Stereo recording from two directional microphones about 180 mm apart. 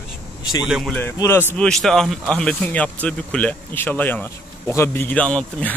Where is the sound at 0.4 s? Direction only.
25° left (ahead or behind).